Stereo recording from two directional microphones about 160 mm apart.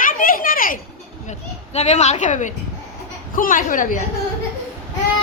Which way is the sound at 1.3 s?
45° left (ahead or behind).